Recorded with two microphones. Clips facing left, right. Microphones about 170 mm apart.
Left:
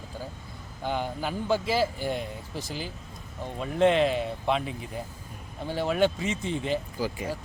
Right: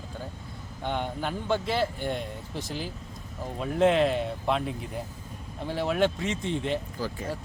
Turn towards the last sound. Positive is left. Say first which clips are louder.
# left 2 dB
turn(degrees=10)  # may be behind; listen again after turning